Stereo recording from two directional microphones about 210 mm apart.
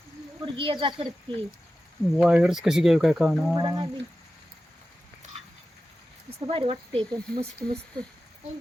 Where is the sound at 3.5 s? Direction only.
20° right (ahead or behind).